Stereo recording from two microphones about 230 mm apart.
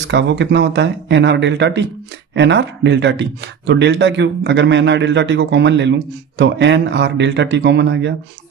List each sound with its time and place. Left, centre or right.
0.1 s speech: right